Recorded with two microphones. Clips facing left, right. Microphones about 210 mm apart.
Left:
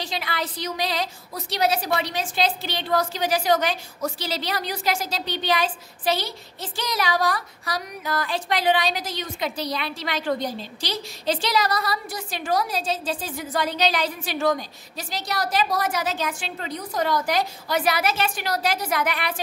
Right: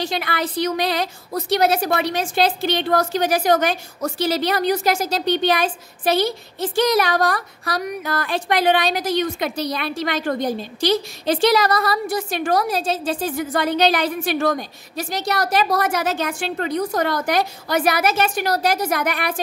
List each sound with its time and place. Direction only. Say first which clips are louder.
0.0 s a woman's voice: right 6 dB; 60° right (ahead or behind)